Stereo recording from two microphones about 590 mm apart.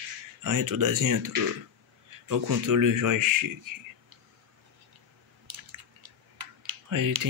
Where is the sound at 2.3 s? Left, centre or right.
Right.